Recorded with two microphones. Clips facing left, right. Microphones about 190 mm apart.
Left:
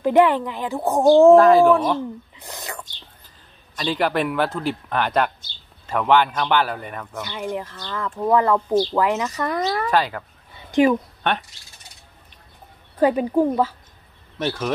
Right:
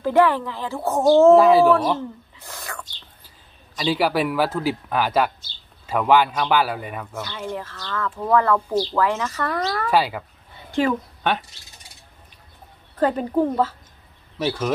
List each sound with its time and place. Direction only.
0.0 s speech: 20° left (ahead or behind)
1.3 s speech: 5° right (ahead or behind)
2.0 s a sound: 20° left (ahead or behind)
3.7 s a man's voice: 5° right (ahead or behind)
7.2 s speech: 15° left (ahead or behind)
9.8 s a man's voice: 10° right (ahead or behind)
10.7 s a woman's voice: 15° left (ahead or behind)
13.0 s speech: 10° left (ahead or behind)
14.4 s speech: 5° right (ahead or behind)